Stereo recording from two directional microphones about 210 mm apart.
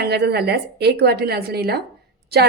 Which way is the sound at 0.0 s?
50° right (ahead or behind).